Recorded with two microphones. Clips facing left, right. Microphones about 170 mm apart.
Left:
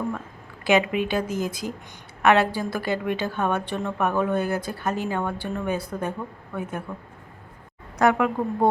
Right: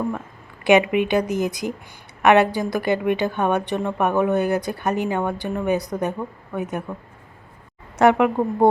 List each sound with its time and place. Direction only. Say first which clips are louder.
0.6 s a woman's voice: right 5 dB; 20° right (ahead or behind)